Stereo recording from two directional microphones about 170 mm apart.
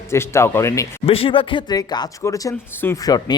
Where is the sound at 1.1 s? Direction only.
30° left (ahead or behind).